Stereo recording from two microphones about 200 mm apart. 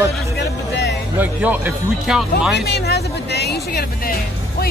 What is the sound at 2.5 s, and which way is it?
Speech, 55° left (ahead or behind).